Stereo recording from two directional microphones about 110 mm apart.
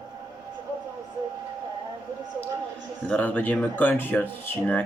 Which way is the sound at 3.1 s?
15° left (ahead or behind).